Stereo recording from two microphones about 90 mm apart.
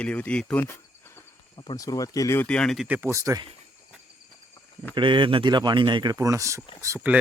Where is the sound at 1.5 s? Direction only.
55° left (ahead or behind).